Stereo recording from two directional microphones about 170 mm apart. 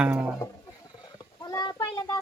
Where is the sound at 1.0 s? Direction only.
25° left (ahead or behind).